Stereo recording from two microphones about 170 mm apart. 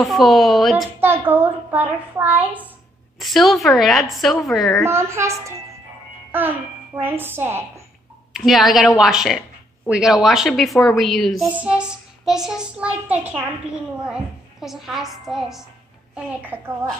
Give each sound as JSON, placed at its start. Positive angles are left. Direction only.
{"t": 0.0, "sound": "speech", "side_deg": 0}
{"t": 1.0, "sound": "a child's voice", "side_deg": -10}
{"t": 4.8, "sound": "a child's voice", "side_deg": -15}
{"t": 7.0, "sound": "a child's voice", "side_deg": -10}
{"t": 8.3, "sound": "speech", "side_deg": 0}